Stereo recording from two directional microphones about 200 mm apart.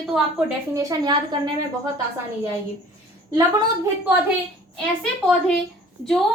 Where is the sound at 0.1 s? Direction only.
5° right (ahead or behind).